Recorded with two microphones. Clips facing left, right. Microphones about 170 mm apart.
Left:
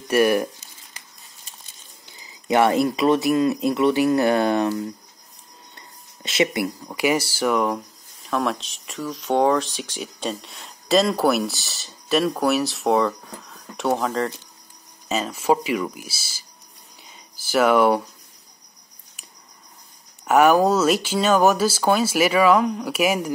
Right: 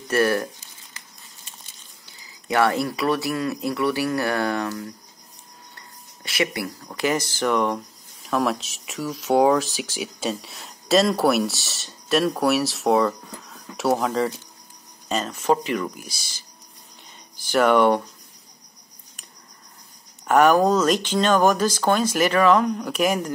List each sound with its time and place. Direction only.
0.1 s speech: 15° left (ahead or behind)
2.4 s speech: 20° left (ahead or behind)
6.2 s speech: 20° left (ahead or behind); by 16.4 s 5° left (ahead or behind)
17.5 s speech: 5° left (ahead or behind)
20.2 s speech: 5° left (ahead or behind)